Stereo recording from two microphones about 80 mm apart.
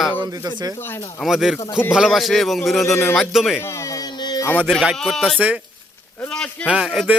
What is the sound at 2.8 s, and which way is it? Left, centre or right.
Speech, left.